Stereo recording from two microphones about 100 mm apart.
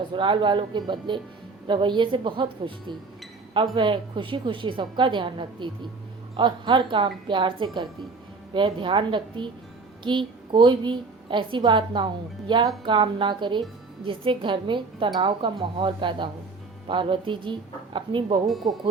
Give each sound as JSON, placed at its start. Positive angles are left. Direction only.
{"t": 0.1, "sound": "a woman's voice", "side_deg": -55}